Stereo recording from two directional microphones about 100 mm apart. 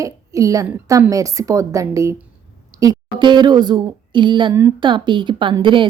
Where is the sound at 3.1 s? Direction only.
50° right (ahead or behind).